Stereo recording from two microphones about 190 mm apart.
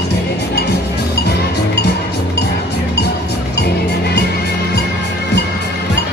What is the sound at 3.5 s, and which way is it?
Music, 60° left (ahead or behind).